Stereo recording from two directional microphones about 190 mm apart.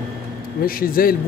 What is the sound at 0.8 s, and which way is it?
Speech, 50° left (ahead or behind).